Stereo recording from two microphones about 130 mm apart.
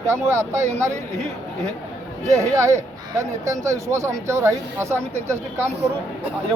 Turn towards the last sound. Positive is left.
turn(degrees=-20)  # may be behind; listen again after turning